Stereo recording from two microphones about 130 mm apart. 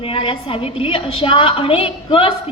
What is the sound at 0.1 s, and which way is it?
A woman's voice, 40° left (ahead or behind).